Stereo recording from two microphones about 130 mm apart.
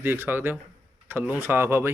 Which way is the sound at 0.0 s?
15° right (ahead or behind).